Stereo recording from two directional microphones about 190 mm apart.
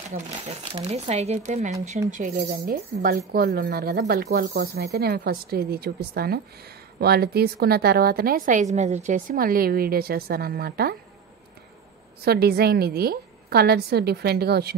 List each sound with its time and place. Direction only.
0.1 s a woman's voice: 35° right (ahead or behind); by 8.6 s 50° right (ahead or behind)
8.7 s a woman's voice: 35° right (ahead or behind); by 11.0 s 55° right (ahead or behind)
12.3 s a woman's voice: 55° right (ahead or behind)